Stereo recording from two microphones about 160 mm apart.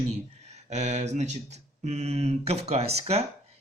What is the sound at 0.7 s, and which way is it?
Speech, 45° right (ahead or behind).